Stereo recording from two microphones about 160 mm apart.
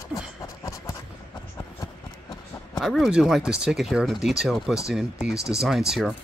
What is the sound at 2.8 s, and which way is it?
Speech, centre (ahead or behind).